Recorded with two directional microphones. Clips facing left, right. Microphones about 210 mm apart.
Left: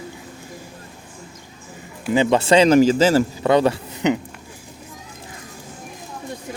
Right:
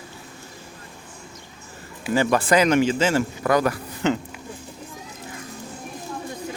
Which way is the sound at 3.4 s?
25° left (ahead or behind).